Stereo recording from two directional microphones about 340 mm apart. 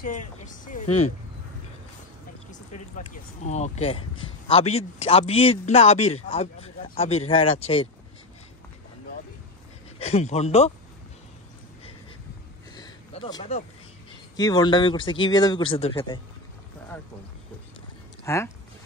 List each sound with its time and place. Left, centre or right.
0.8 s speech: left
2.5 s speech: left
9.9 s speech: centre
12.7 s a sound: centre
14.3 s speech: centre
18.2 s speech: centre